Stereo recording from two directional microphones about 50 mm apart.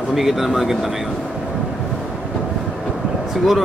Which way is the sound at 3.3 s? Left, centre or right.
Centre.